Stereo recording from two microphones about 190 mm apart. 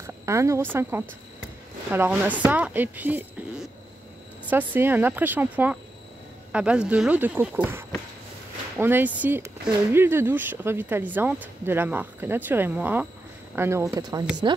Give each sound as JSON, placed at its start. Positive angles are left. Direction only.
{"t": 0.0, "sound": "a woman's voice", "side_deg": -15}